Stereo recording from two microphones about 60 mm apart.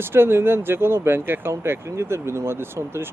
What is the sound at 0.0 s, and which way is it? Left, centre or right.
Speech, right.